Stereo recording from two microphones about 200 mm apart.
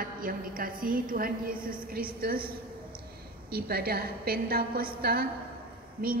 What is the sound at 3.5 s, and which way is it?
A woman's voice, 50° right (ahead or behind).